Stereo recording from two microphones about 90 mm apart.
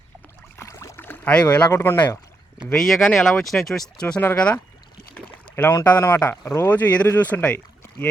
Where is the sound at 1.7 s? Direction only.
25° left (ahead or behind).